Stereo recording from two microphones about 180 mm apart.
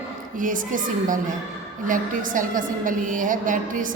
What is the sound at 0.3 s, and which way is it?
A woman's voice, 50° right (ahead or behind).